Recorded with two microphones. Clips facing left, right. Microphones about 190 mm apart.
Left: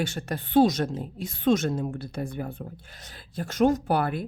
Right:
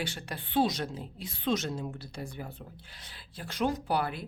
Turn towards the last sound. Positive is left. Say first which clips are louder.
# left 5 dB
turn(degrees=50)  # may be behind; listen again after turning